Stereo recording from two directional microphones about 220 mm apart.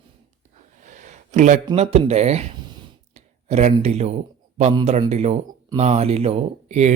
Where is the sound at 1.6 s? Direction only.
30° right (ahead or behind).